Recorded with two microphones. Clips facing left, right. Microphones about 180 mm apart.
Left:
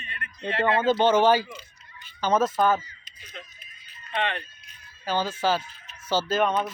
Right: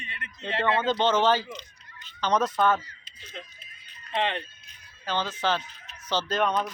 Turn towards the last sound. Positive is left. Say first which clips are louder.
# left 2 dB
turn(degrees=5)  # may be behind; listen again after turning